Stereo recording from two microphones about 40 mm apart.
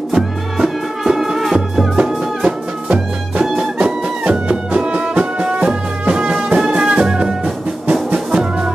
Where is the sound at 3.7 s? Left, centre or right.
Right.